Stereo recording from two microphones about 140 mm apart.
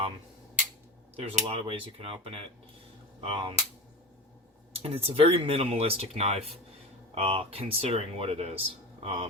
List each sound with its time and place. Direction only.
1.1 s speech: 40° right (ahead or behind)
4.7 s speech: 45° right (ahead or behind)